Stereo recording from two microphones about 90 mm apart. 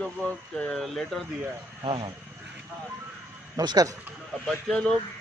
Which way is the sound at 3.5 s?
45° right (ahead or behind).